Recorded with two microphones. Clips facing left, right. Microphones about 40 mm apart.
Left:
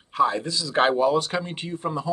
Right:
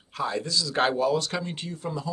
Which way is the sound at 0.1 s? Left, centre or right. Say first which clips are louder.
Left 6 dB; left.